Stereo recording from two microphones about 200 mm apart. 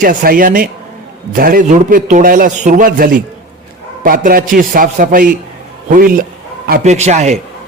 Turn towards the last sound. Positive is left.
turn(degrees=-35)  # may be behind; listen again after turning